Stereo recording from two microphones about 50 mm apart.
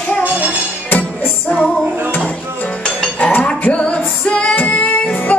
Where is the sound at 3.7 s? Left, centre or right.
Left.